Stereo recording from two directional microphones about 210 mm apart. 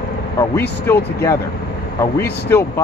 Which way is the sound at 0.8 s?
10° left (ahead or behind).